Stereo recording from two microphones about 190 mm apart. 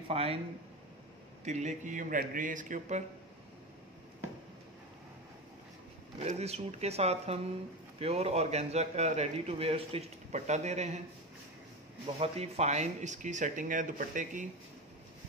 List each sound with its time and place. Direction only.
0.1 s a man's voice: 30° right (ahead or behind)
1.4 s speech: 35° right (ahead or behind)
6.2 s a man's voice: 35° right (ahead or behind)
12.2 s a man's voice: 35° right (ahead or behind)